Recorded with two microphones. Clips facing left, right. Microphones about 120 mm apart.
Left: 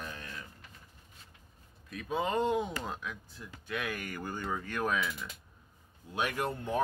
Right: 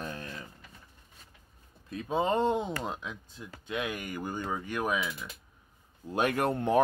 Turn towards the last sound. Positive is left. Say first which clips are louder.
# right 7 dB
turn(degrees=-70)  # may be behind; listen again after turning